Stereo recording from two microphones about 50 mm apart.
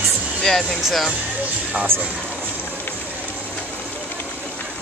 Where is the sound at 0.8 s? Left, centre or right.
Centre.